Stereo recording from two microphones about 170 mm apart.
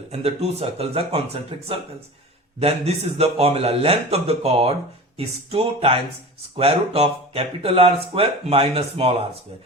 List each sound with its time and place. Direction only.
0.1 s speech: 35° right (ahead or behind)